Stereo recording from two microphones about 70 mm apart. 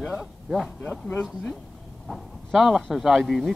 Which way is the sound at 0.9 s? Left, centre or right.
Left.